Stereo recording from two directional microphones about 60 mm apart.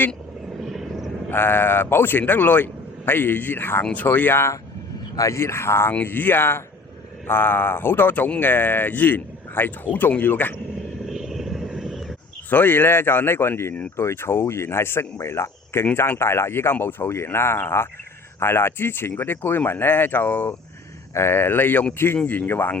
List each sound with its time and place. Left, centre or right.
0.6 s vehicle: centre
1.3 s speech: left
5.1 s speech: left
5.9 s speech: left
11.0 s vehicle: centre
12.5 s speech: left
21.1 s speech: left